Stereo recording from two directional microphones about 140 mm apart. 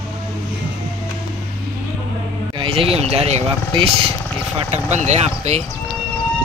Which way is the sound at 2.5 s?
40° right (ahead or behind).